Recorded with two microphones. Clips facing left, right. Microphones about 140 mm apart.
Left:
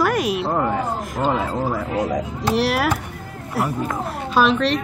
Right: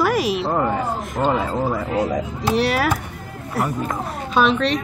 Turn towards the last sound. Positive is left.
turn(degrees=0)  # may be behind; listen again after turning